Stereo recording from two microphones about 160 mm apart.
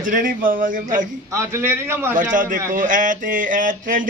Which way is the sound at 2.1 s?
55° right (ahead or behind).